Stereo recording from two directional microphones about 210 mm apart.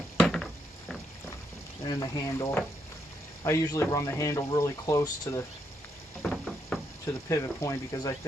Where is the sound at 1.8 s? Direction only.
15° left (ahead or behind).